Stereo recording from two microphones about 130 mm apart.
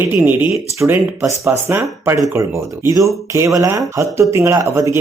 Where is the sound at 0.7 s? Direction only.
15° right (ahead or behind).